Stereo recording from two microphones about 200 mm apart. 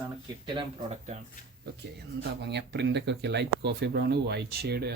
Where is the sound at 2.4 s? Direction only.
60° right (ahead or behind).